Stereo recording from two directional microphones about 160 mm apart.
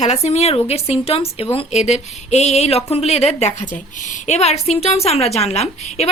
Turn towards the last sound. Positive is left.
turn(degrees=40)  # may be behind; listen again after turning